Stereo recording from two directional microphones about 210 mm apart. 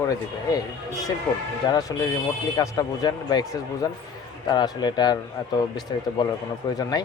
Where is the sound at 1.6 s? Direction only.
20° left (ahead or behind).